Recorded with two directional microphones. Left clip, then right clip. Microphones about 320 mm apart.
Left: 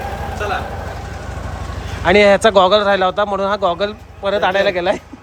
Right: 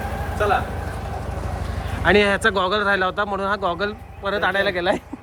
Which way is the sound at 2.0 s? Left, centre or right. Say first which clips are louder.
Left 6 dB; centre.